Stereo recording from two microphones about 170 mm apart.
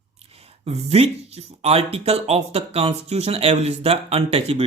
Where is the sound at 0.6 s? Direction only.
35° right (ahead or behind).